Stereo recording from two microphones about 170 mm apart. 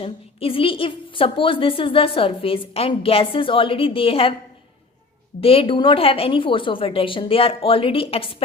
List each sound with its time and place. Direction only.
0.0 s a woman's voice: 35° left (ahead or behind)
5.4 s a woman's voice: 35° left (ahead or behind)